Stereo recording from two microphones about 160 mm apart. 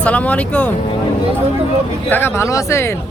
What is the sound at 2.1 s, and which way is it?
Speech, 15° left (ahead or behind).